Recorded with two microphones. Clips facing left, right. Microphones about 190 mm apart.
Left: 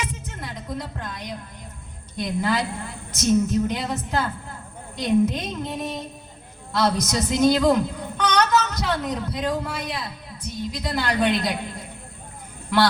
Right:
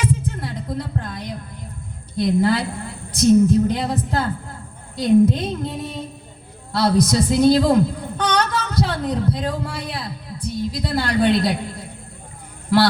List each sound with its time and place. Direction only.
0.0 s a sound: 35° right (ahead or behind)
2.1 s a woman's voice: 35° right (ahead or behind)
6.7 s a woman's voice: 35° right (ahead or behind)